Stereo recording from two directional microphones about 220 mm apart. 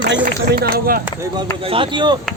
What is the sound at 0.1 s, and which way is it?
Speech, 45° right (ahead or behind).